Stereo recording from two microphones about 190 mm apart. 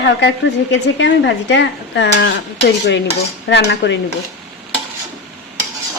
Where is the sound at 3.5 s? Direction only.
65° left (ahead or behind).